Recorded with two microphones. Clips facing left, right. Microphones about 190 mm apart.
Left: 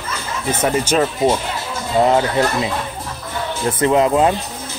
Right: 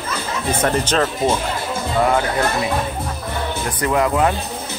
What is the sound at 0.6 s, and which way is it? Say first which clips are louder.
Speech: left 2 dB; 10° left (ahead or behind).